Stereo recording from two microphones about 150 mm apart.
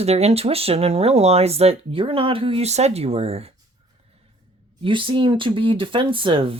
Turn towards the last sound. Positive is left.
turn(degrees=-35)  # may be behind; listen again after turning